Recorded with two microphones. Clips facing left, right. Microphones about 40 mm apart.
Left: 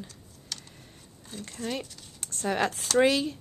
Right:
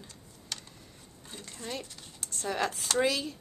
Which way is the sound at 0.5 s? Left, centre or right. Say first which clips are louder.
Even; centre.